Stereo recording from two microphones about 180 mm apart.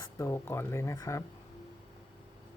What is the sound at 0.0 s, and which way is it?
Speech, 15° left (ahead or behind).